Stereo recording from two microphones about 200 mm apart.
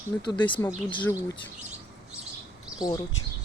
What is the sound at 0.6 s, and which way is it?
Speech, 15° left (ahead or behind).